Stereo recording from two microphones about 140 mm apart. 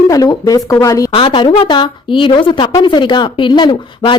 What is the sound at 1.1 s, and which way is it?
A woman's voice, 40° left (ahead or behind).